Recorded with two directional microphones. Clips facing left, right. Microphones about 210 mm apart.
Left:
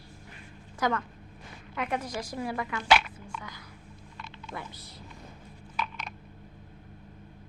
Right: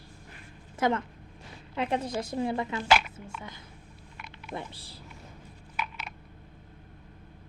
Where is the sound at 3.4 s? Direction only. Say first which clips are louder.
Even; 25° right (ahead or behind).